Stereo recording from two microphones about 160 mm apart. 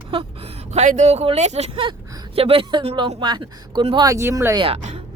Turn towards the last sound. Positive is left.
turn(degrees=-40)  # may be behind; listen again after turning